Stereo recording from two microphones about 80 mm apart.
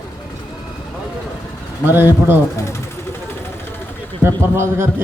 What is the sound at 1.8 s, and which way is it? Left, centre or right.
Speech, right.